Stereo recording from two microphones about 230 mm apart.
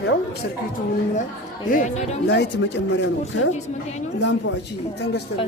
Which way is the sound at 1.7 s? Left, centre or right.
Left.